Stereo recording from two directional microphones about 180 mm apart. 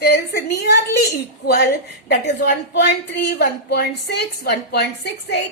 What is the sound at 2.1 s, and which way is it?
A woman's voice, 65° left (ahead or behind).